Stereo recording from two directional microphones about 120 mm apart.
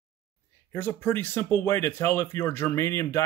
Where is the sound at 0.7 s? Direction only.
15° left (ahead or behind).